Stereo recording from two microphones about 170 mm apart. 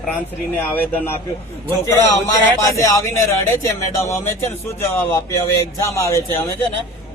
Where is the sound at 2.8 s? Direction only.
20° left (ahead or behind).